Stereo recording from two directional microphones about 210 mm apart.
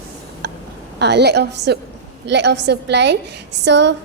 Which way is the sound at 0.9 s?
55° right (ahead or behind).